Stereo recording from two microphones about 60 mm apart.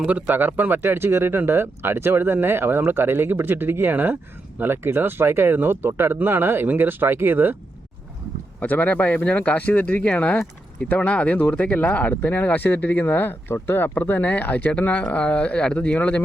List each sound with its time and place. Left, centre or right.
0.0 s speech: right
8.6 s speech: left